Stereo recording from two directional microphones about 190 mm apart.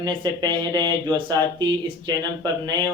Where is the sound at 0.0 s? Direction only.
20° right (ahead or behind).